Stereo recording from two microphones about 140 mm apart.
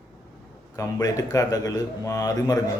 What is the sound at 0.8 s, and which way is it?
Speech, 25° left (ahead or behind).